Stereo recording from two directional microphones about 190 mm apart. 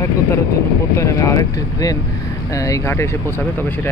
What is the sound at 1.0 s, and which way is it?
Speech, 15° left (ahead or behind).